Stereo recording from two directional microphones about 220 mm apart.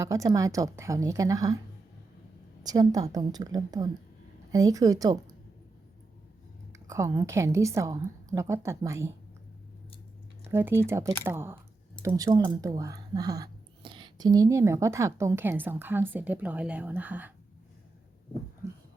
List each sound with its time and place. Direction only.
0.0 s speech: 15° right (ahead or behind)
2.6 s speech: 15° right (ahead or behind)
6.7 s speech: 15° right (ahead or behind)
10.5 s speech: 10° right (ahead or behind)